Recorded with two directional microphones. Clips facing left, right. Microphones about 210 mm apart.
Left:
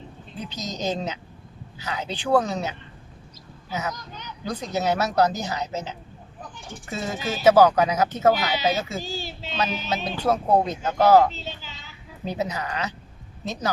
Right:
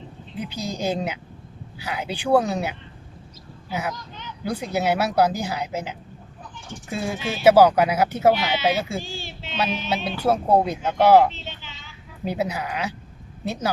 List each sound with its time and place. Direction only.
0.4 s a woman's voice: 10° right (ahead or behind)
3.9 s speech: 40° left (ahead or behind)
4.4 s a woman's voice: 10° right (ahead or behind)
7.2 s speech: 40° left (ahead or behind)
7.4 s a woman's voice: 10° right (ahead or behind)
9.0 s a sound: 40° left (ahead or behind)
9.9 s a woman's voice: 10° right (ahead or behind)
11.3 s a sound: 40° left (ahead or behind)
12.2 s a woman's voice: 10° right (ahead or behind)